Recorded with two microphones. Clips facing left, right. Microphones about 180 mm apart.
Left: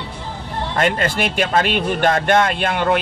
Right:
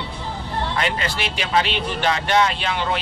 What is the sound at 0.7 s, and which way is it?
Speech, 50° left (ahead or behind).